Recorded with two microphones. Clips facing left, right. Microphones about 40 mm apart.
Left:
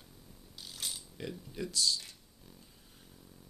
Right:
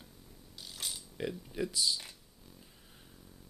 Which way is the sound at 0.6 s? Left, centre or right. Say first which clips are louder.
Even; centre.